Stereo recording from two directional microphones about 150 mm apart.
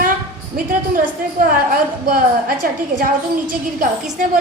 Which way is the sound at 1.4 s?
70° right (ahead or behind).